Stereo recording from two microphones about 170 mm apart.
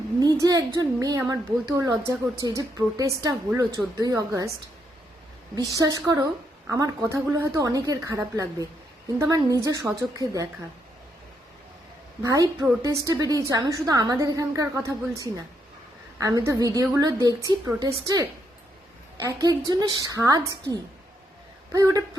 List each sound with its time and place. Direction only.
0.2 s a woman's voice: 20° right (ahead or behind)
5.7 s a woman's voice: 20° right (ahead or behind)
12.2 s a woman's voice: 20° right (ahead or behind)
19.4 s a woman's voice: 20° right (ahead or behind)